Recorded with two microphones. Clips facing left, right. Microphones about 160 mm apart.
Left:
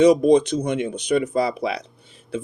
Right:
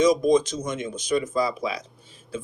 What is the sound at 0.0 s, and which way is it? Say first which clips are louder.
A man's voice: left 5 dB; 65° left (ahead or behind).